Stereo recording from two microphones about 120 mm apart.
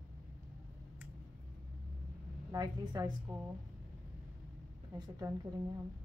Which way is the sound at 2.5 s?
35° right (ahead or behind).